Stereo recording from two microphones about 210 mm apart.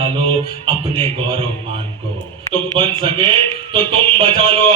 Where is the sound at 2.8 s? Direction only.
25° right (ahead or behind).